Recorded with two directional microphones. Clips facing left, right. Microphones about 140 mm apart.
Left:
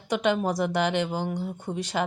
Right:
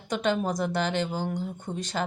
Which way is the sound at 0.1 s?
15° left (ahead or behind).